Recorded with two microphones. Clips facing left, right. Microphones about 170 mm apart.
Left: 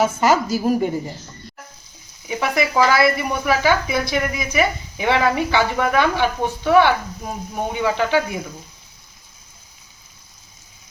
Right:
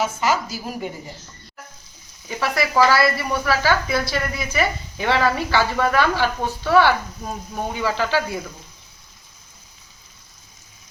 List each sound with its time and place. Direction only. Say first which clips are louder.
0.0 s a woman's voice: left 5 dB; 50° left (ahead or behind)
2.2 s speech: left 2 dB; 20° left (ahead or behind)